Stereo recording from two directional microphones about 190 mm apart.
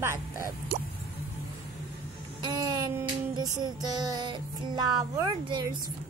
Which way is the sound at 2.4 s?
20° right (ahead or behind).